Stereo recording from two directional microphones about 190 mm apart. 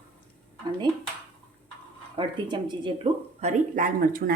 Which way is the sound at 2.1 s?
25° right (ahead or behind).